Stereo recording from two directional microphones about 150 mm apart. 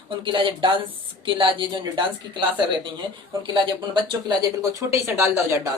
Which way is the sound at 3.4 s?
30° right (ahead or behind).